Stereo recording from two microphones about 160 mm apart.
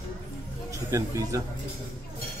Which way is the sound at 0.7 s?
20° right (ahead or behind).